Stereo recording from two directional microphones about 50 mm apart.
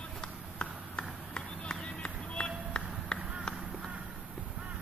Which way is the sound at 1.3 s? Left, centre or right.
Centre.